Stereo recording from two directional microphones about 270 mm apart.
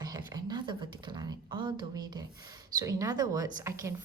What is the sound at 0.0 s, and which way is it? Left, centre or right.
Speech, centre.